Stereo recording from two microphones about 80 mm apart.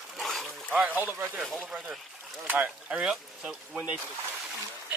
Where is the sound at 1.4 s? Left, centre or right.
Centre.